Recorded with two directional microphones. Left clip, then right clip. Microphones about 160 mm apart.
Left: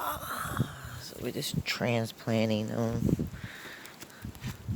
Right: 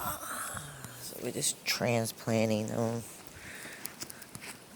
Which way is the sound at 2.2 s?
30° left (ahead or behind).